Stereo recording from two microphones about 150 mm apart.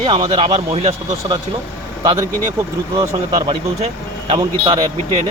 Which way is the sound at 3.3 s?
35° right (ahead or behind).